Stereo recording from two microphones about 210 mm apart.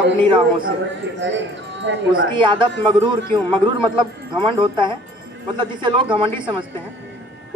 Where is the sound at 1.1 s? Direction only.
60° right (ahead or behind).